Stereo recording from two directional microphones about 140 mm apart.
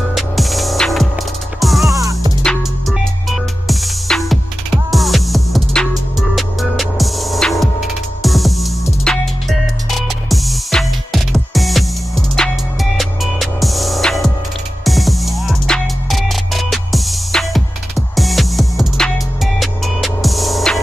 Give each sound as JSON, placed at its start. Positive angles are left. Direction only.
{"t": 0.1, "sound": "music", "side_deg": 0}
{"t": 1.9, "sound": "music", "side_deg": -25}
{"t": 2.4, "sound": "music", "side_deg": 0}